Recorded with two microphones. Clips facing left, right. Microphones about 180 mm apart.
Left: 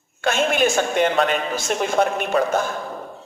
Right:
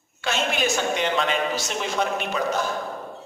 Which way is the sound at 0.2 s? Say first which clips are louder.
Left 6 dB; 50° left (ahead or behind).